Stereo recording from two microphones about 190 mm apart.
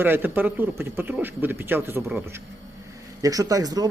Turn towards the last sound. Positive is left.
turn(degrees=-20)  # may be behind; listen again after turning